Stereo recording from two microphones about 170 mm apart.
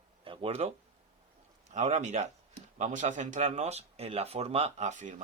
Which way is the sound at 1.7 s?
45° right (ahead or behind).